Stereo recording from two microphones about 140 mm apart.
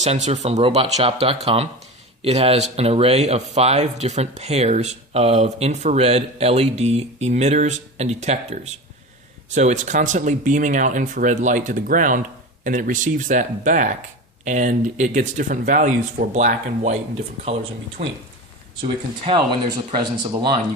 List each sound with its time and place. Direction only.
0.0 s speech: 50° right (ahead or behind)
18.8 s speech: 35° right (ahead or behind)